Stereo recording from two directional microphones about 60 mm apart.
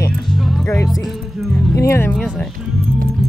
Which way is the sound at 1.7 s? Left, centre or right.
Left.